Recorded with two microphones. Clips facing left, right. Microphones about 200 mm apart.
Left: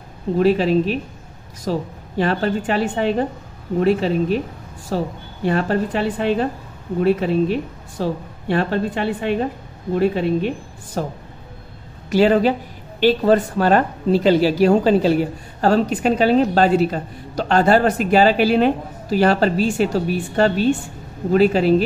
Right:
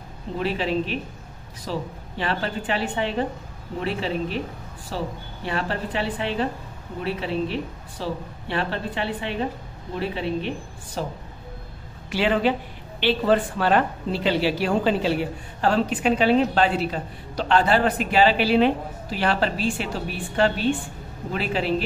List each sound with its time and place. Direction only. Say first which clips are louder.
0.4 s a woman's voice: left 9 dB; 40° left (ahead or behind)